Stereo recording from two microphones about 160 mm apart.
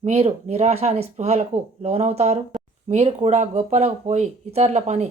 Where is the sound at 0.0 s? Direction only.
45° right (ahead or behind).